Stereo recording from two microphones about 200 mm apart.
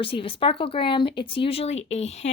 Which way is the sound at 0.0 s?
25° left (ahead or behind).